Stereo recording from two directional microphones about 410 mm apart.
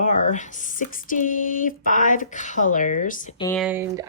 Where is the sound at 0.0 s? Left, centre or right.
Centre.